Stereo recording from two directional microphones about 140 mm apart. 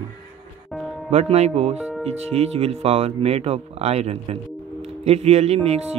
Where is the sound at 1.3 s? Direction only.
50° right (ahead or behind).